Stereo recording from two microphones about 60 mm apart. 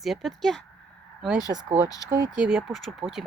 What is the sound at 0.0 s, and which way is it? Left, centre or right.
Speech, centre.